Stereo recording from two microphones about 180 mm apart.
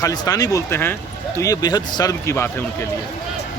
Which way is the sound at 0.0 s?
20° left (ahead or behind).